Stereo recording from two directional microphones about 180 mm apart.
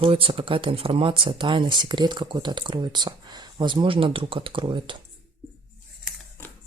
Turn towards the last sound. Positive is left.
turn(degrees=-25)  # may be behind; listen again after turning